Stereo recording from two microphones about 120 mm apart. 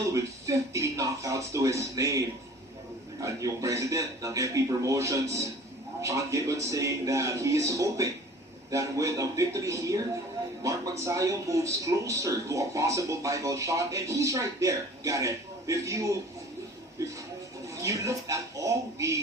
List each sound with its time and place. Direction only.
0.1 s speech: 25° right (ahead or behind)
17.7 s speech: 25° right (ahead or behind)